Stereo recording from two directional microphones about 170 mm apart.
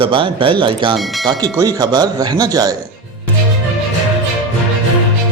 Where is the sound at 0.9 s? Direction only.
Centre (ahead or behind).